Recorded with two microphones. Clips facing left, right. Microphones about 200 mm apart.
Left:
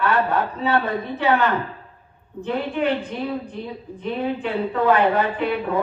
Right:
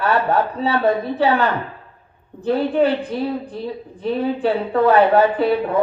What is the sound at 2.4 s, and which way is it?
A woman's voice, 35° right (ahead or behind).